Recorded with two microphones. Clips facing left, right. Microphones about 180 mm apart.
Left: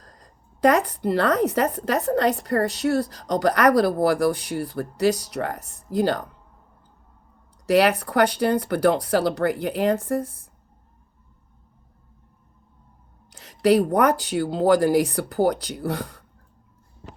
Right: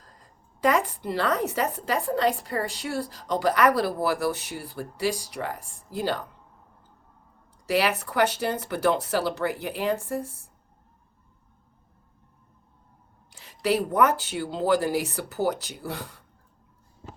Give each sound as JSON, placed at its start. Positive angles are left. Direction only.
{"t": 0.0, "sound": "a sound", "side_deg": 45}
{"t": 1.5, "sound": "speech", "side_deg": 45}
{"t": 7.7, "sound": "speech", "side_deg": 45}
{"t": 13.3, "sound": "speech", "side_deg": 45}